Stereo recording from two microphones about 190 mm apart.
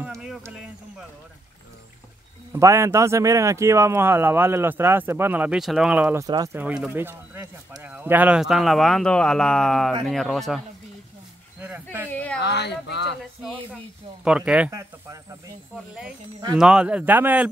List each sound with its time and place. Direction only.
0.0 s a sound: 5° right (ahead or behind)
2.5 s speech: 15° right (ahead or behind)
6.6 s speech: 5° right (ahead or behind)
11.6 s speech: 10° right (ahead or behind)
12.1 s a sound: 5° left (ahead or behind)
12.4 s speech: 65° left (ahead or behind)
14.2 s speech: 5° right (ahead or behind)
14.7 s speech: 15° right (ahead or behind)
16.5 s speech: 5° right (ahead or behind)